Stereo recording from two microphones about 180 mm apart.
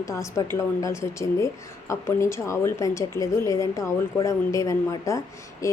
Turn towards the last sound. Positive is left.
turn(degrees=15)  # may be behind; listen again after turning